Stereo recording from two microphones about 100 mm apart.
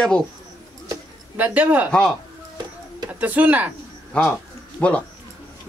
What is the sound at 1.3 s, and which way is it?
Speech, 15° right (ahead or behind).